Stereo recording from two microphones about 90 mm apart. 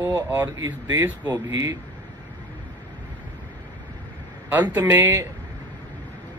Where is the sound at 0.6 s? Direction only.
45° right (ahead or behind).